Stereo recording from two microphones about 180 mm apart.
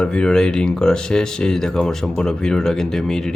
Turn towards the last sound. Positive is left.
turn(degrees=5)  # may be behind; listen again after turning